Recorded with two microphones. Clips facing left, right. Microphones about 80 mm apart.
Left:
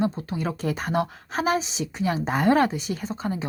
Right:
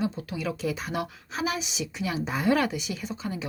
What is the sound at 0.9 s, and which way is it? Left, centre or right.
Speech, left.